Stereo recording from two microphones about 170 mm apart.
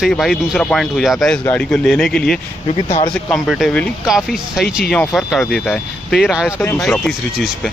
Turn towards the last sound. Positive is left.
turn(degrees=0)  # may be behind; listen again after turning